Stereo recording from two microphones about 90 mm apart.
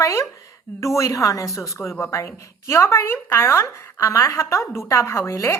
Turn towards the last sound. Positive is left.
turn(degrees=35)  # may be behind; listen again after turning